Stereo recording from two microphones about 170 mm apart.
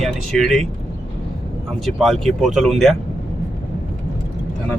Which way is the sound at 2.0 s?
Centre (ahead or behind).